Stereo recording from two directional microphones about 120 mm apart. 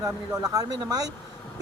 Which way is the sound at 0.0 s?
30° right (ahead or behind).